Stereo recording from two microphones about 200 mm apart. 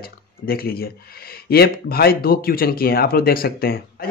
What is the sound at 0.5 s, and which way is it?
Speech, 50° left (ahead or behind).